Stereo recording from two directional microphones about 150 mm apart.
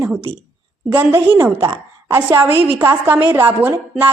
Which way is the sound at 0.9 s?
15° right (ahead or behind).